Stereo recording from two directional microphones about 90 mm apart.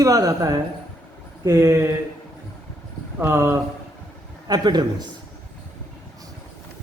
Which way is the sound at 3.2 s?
25° right (ahead or behind).